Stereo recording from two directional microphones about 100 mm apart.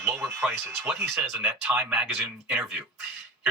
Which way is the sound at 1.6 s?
15° right (ahead or behind).